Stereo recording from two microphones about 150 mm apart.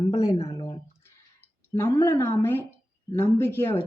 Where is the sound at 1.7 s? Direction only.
15° left (ahead or behind).